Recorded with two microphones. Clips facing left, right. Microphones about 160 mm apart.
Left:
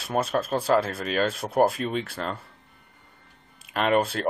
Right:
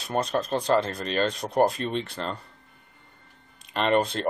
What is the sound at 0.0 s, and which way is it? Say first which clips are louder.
Speech: left 1 dB; 5° left (ahead or behind).